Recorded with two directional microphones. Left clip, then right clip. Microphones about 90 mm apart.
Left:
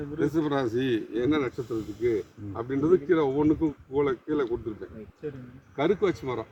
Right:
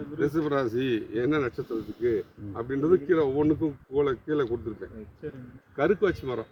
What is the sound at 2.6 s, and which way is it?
Speech, centre (ahead or behind).